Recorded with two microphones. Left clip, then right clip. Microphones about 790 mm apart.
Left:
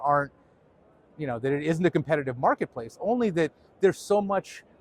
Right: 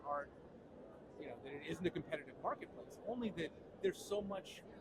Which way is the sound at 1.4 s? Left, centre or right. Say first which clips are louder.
Left 19 dB; left.